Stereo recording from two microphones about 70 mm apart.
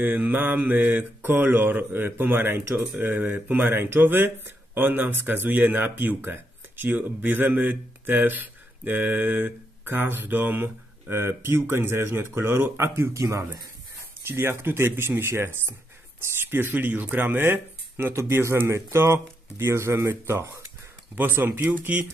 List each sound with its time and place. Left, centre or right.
0.0 s speech: right
14.2 s speech: right
21.1 s speech: right